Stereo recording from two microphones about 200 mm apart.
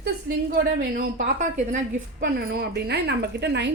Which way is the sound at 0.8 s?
45° right (ahead or behind).